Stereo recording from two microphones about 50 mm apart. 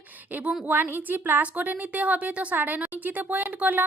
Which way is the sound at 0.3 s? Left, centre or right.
Right.